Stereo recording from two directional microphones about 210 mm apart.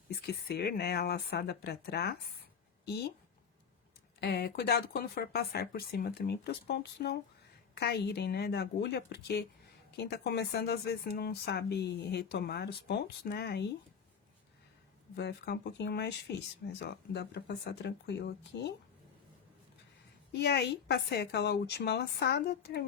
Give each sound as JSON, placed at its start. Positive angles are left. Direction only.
{"t": 0.1, "sound": "speech", "side_deg": 50}
{"t": 4.2, "sound": "speech", "side_deg": 50}
{"t": 15.1, "sound": "speech", "side_deg": 50}
{"t": 20.3, "sound": "speech", "side_deg": 50}